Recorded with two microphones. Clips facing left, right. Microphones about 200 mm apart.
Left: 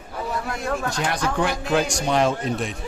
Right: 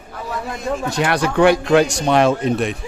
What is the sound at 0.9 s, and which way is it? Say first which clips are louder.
Speech: right 6 dB; 65° right (ahead or behind).